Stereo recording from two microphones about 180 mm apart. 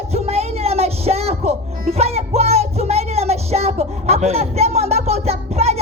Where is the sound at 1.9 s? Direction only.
35° right (ahead or behind).